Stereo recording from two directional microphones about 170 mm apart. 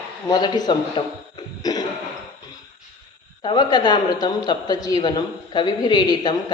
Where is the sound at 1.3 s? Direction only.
20° left (ahead or behind).